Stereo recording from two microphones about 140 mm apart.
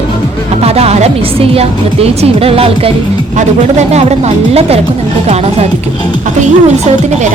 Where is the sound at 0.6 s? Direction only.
45° right (ahead or behind).